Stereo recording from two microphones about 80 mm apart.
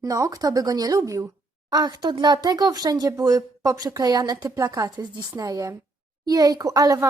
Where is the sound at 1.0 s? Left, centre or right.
Right.